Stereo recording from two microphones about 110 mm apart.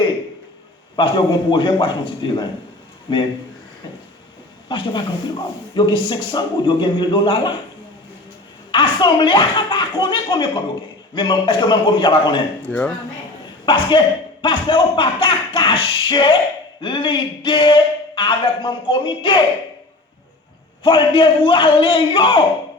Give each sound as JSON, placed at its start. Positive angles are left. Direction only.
{"t": 0.9, "sound": "a man's voice", "side_deg": 45}
{"t": 4.7, "sound": "a man's voice", "side_deg": 45}
{"t": 8.7, "sound": "a man's voice", "side_deg": 45}
{"t": 12.6, "sound": "speech", "side_deg": 15}
{"t": 13.7, "sound": "a man's voice", "side_deg": 45}
{"t": 20.8, "sound": "a man's voice", "side_deg": 50}